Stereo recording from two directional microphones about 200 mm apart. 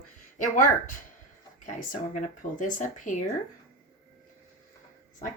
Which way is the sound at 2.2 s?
40° left (ahead or behind).